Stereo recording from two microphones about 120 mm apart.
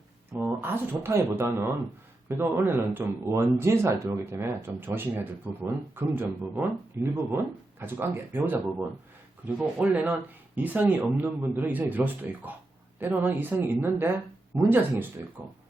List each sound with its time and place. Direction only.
0.3 s speech: 20° right (ahead or behind)
9.7 s speech: 10° right (ahead or behind)